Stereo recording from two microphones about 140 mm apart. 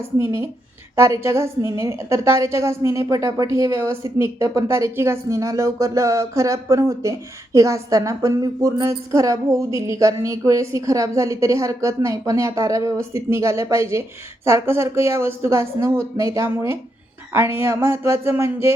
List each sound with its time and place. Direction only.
0.2 s a woman's voice: 20° right (ahead or behind)